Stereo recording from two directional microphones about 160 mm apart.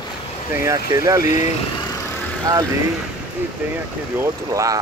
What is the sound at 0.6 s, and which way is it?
Speech, 20° right (ahead or behind).